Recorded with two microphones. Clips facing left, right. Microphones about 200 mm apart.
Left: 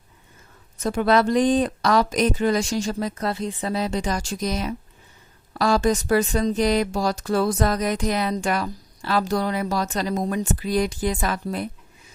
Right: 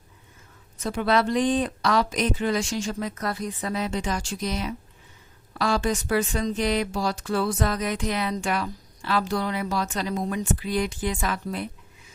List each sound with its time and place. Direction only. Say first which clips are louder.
0.8 s speech: left 4 dB; 45° left (ahead or behind)